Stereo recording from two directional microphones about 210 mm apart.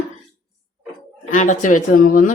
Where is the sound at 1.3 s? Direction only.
35° left (ahead or behind).